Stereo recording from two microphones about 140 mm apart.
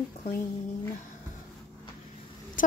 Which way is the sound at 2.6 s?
70° left (ahead or behind).